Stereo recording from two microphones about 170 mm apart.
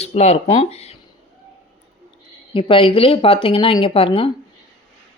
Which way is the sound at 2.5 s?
30° left (ahead or behind).